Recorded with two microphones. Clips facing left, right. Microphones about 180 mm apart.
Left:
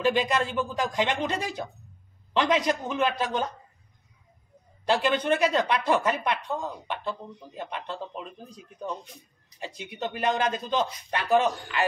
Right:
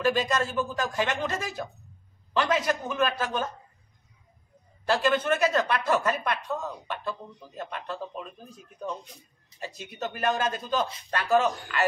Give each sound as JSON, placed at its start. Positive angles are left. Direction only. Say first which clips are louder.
{"t": 0.0, "sound": "speech", "louder": "left 1 dB", "side_deg": 20}
{"t": 4.8, "sound": "speech", "louder": "even", "side_deg": 15}
{"t": 9.6, "sound": "speech", "louder": "left 1 dB", "side_deg": 15}